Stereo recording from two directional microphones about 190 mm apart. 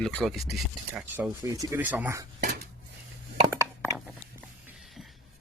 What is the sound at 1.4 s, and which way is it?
Speech, 20° right (ahead or behind).